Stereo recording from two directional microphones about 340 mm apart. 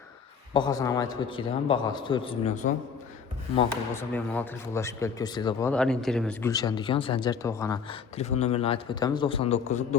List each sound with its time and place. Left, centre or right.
0.5 s speech: centre
4.1 s speech: centre